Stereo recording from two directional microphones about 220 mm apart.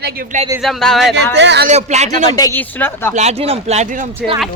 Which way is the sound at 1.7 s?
30° right (ahead or behind).